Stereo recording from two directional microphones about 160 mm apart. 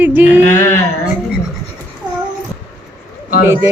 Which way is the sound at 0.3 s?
50° left (ahead or behind).